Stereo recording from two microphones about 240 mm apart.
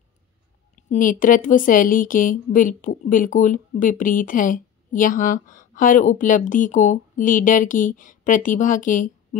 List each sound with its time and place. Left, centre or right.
0.8 s a woman's voice: left